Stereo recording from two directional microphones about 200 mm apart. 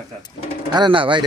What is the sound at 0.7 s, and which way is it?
Speech, 25° right (ahead or behind).